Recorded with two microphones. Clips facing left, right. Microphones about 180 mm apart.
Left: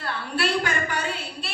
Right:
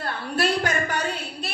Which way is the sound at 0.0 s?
40° right (ahead or behind).